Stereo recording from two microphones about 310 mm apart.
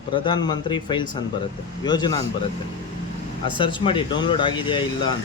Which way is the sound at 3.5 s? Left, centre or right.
Centre.